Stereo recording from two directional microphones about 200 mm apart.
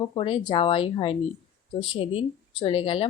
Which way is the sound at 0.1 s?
25° left (ahead or behind).